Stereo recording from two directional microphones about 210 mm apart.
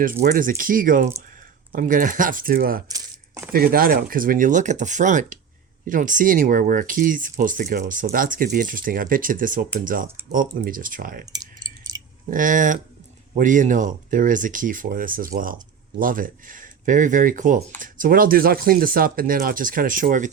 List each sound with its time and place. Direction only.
0.3 s speech: 40° right (ahead or behind)
2.9 s coin: 15° right (ahead or behind)
3.5 s speech: 45° right (ahead or behind)
11.3 s clicking: 20° right (ahead or behind)
11.9 s a sound: 20° right (ahead or behind)
12.3 s speech: 40° right (ahead or behind)